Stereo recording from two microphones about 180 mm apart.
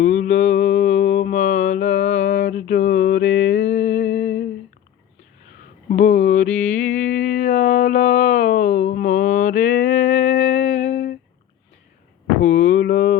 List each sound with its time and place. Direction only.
0.0 s mantra: 40° left (ahead or behind)
3.5 s humming: 80° left
5.9 s mantra: 50° left (ahead or behind)
6.9 s a sound: 45° left (ahead or behind)
12.4 s a sound: 40° left (ahead or behind)
12.7 s mantra: 50° left (ahead or behind)